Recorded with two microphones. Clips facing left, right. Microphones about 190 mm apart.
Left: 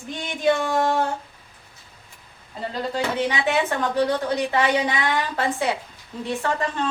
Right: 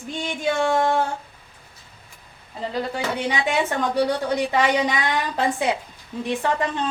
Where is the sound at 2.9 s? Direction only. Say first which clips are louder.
Left 4 dB; 15° right (ahead or behind).